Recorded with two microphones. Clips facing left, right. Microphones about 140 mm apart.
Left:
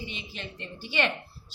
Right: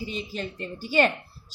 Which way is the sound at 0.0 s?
40° right (ahead or behind).